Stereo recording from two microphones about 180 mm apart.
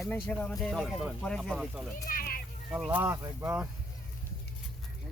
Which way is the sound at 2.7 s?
5° right (ahead or behind).